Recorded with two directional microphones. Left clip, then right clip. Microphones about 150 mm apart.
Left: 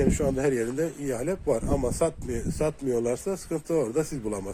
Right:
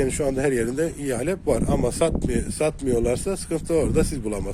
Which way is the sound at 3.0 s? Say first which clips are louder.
Right 4 dB; 50° right (ahead or behind).